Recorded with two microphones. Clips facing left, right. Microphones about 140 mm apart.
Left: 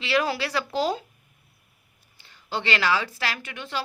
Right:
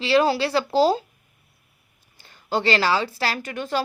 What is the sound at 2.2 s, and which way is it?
Speech, 45° right (ahead or behind).